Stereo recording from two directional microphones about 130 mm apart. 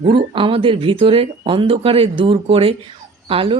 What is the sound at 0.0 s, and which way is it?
Speech, 40° right (ahead or behind).